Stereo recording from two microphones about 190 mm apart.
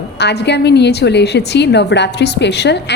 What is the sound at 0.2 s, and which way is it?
A woman's voice, 60° left (ahead or behind).